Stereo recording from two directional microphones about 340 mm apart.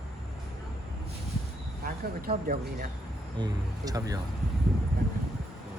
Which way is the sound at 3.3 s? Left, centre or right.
Centre.